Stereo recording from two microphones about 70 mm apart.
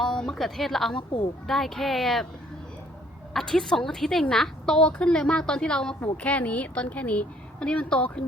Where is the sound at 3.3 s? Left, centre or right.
Centre.